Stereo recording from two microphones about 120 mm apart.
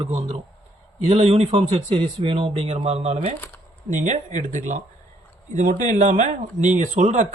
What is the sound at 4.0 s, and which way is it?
Speech, 90° right.